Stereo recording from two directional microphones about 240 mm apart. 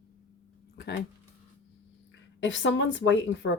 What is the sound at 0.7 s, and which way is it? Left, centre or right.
Speech, left.